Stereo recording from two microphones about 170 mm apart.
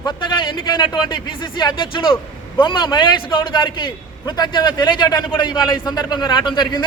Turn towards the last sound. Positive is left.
turn(degrees=25)  # may be behind; listen again after turning